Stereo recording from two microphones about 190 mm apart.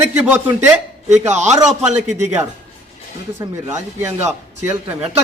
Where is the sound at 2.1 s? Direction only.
15° right (ahead or behind).